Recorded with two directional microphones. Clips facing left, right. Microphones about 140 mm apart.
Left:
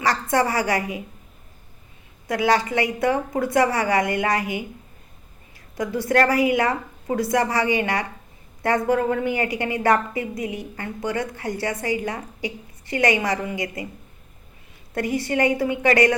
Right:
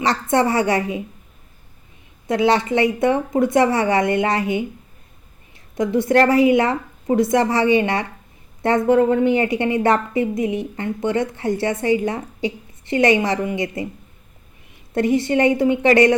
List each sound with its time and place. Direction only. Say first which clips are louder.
0.0 s a woman's voice: right 3 dB; 25° right (ahead or behind)
2.2 s a woman's voice: right 3 dB; 25° right (ahead or behind)
5.7 s a woman's voice: right 5 dB; 25° right (ahead or behind)
14.9 s a woman's voice: right 5 dB; 25° right (ahead or behind)